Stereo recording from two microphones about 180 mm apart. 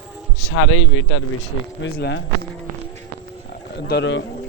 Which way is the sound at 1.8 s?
85° left.